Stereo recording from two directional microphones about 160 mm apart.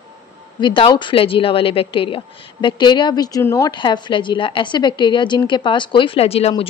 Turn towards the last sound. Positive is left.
turn(degrees=40)  # may be behind; listen again after turning